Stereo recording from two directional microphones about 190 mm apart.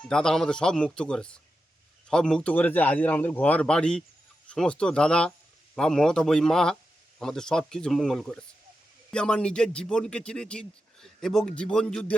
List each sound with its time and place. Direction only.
0.1 s a man's voice: 5° left (ahead or behind)